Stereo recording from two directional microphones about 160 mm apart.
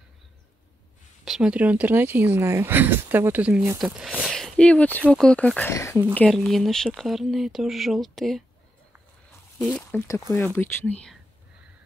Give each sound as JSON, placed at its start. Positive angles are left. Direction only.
{"t": 1.2, "sound": "speech", "side_deg": -5}
{"t": 6.1, "sound": "speech", "side_deg": 5}
{"t": 9.6, "sound": "speech", "side_deg": 5}